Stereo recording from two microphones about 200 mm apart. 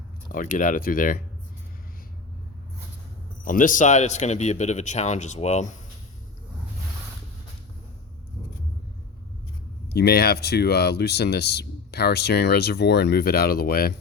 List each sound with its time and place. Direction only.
0.3 s speech: 40° left (ahead or behind)
3.4 s a man's voice: 45° left (ahead or behind)
9.9 s speech: 55° left (ahead or behind)